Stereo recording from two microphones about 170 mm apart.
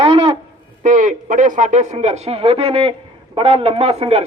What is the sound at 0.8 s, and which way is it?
A man's voice, 50° right (ahead or behind).